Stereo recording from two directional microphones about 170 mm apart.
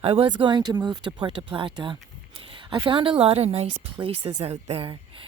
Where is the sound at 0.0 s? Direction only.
35° right (ahead or behind).